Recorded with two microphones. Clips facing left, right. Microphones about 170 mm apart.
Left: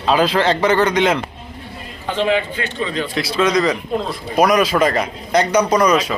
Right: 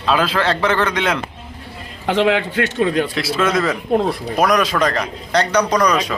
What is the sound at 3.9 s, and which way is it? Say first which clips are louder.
Speech: right 5 dB; 60° right (ahead or behind).